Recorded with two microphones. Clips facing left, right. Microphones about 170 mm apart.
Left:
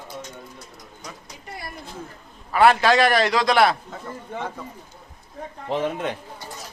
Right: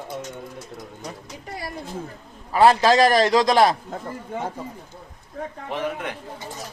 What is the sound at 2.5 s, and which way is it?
Speech, 35° right (ahead or behind).